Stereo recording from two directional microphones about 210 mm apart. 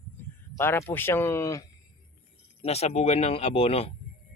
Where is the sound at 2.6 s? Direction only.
30° left (ahead or behind).